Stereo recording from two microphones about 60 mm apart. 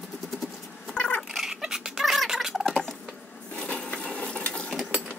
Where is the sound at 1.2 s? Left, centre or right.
Centre.